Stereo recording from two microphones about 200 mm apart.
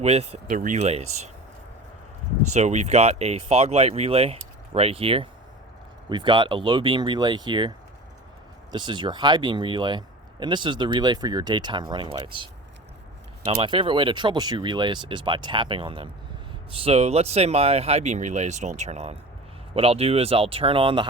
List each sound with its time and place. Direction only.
0.0 s speech: 30° right (ahead or behind)
2.5 s speech: 35° right (ahead or behind)
8.7 s speech: 20° right (ahead or behind)